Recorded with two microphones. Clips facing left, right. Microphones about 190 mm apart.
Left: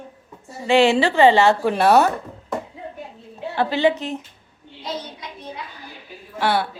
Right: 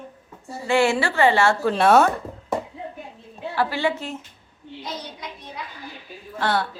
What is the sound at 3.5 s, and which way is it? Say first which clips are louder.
Speech: left 4 dB; 20° left (ahead or behind).